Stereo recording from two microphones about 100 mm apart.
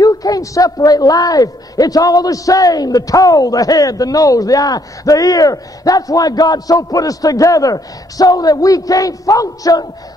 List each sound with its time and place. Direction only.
0.0 s a man's voice: 35° left (ahead or behind)